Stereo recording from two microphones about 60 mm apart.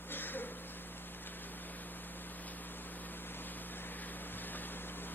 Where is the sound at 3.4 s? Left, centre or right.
Left.